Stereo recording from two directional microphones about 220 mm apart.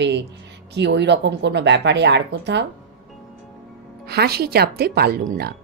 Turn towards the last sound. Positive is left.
turn(degrees=-45)  # may be behind; listen again after turning